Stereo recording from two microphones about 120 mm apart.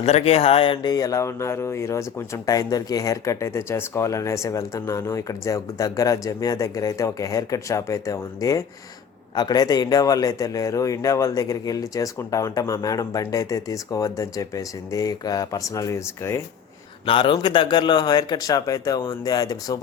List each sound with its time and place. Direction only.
0.0 s speech: 60° left (ahead or behind); by 16.4 s 25° left (ahead or behind)
17.1 s a man's voice: 45° left (ahead or behind)